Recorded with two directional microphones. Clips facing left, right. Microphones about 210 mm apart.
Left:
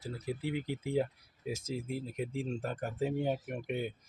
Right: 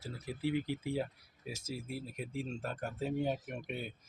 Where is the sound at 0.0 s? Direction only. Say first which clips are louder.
Left 1 dB; 15° left (ahead or behind).